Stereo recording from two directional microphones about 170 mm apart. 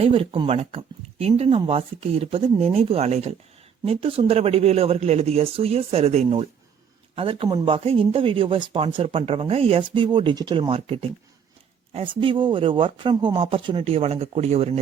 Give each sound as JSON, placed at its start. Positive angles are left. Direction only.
{"t": 0.0, "sound": "speech", "side_deg": -35}